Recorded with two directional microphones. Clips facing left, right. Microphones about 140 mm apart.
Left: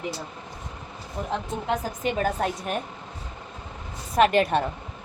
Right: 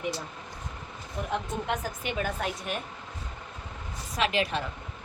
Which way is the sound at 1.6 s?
35° left (ahead or behind).